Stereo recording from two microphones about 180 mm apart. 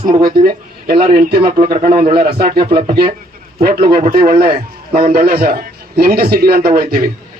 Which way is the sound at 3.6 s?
55° right (ahead or behind).